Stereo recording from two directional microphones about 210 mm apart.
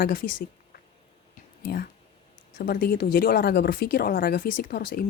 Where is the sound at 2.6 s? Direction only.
45° left (ahead or behind).